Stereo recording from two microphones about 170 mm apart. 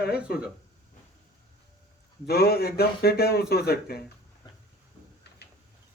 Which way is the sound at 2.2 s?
65° left (ahead or behind).